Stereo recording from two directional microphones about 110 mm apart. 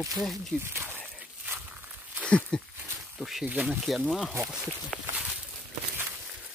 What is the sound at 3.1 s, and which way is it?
Speech, centre (ahead or behind).